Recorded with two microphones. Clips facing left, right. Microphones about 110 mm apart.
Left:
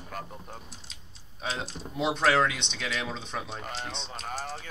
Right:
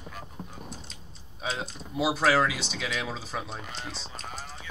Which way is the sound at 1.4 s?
Centre (ahead or behind).